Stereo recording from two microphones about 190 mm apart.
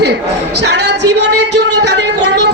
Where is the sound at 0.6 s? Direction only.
65° right (ahead or behind).